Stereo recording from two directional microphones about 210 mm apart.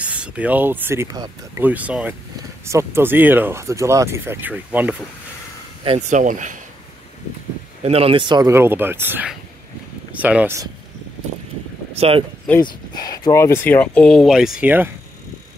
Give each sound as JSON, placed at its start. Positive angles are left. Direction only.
{"t": 0.0, "sound": "speech", "side_deg": -5}
{"t": 5.9, "sound": "speech", "side_deg": -35}
{"t": 7.8, "sound": "speech", "side_deg": -30}
{"t": 12.0, "sound": "speech", "side_deg": -25}
{"t": 12.6, "sound": "speech", "side_deg": 20}